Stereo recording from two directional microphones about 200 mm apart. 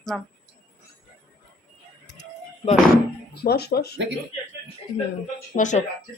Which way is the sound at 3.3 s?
50° left (ahead or behind).